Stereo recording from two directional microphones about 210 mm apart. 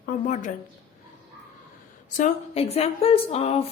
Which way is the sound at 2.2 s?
30° left (ahead or behind).